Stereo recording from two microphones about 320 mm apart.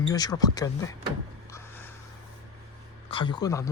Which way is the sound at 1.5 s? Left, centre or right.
Centre.